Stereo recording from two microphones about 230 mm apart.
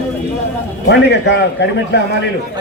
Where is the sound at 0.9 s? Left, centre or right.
Left.